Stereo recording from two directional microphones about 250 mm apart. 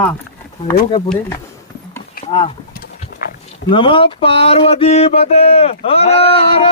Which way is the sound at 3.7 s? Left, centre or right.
Centre.